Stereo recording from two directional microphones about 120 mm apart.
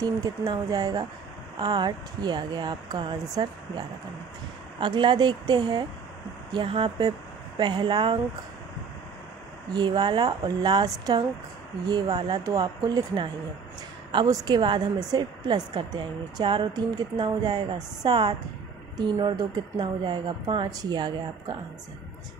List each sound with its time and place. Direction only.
0.0 s a woman's voice: 30° right (ahead or behind)
4.7 s a woman's voice: 40° right (ahead or behind)
6.5 s a woman's voice: 45° right (ahead or behind)
9.8 s a woman's voice: 40° right (ahead or behind)
12.1 s speech: 55° right (ahead or behind)
12.4 s a woman's voice: 30° right (ahead or behind)